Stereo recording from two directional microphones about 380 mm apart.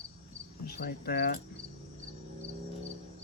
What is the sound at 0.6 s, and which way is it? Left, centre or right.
Speech, left.